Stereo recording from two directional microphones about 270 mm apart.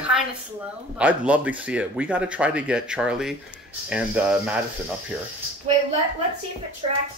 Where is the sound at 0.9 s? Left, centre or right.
Centre.